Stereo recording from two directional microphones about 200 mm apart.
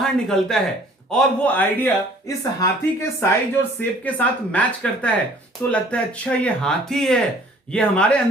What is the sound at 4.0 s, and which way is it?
Speech, 5° left (ahead or behind).